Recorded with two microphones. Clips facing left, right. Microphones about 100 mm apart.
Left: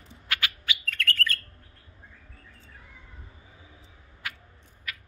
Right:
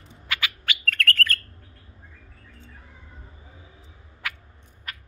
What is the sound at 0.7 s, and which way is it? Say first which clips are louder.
Bird: right 7 dB; 60° right (ahead or behind).